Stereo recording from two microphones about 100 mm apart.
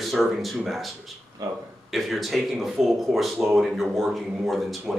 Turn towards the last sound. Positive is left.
turn(degrees=0)  # may be behind; listen again after turning